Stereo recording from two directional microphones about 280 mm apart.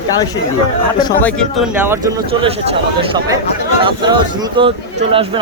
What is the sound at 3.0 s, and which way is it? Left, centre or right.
Speech, centre.